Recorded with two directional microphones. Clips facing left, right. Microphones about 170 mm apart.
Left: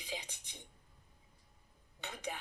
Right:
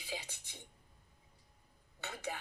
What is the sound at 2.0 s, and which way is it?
Speech, 15° left (ahead or behind).